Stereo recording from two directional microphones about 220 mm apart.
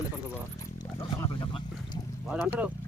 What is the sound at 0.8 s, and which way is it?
Wild animals, 20° left (ahead or behind).